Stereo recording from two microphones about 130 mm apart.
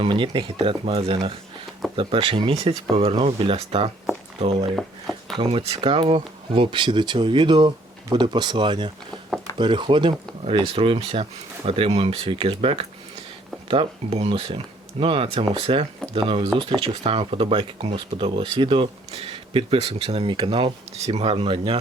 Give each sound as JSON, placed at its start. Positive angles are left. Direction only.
{"t": 0.0, "sound": "speech", "side_deg": -40}
{"t": 4.8, "sound": "speech", "side_deg": 0}
{"t": 5.4, "sound": "speech", "side_deg": -45}